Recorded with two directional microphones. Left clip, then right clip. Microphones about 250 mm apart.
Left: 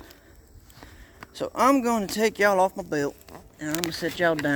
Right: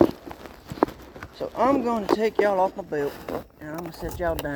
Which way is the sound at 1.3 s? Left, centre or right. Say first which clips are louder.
Left 1 dB; left.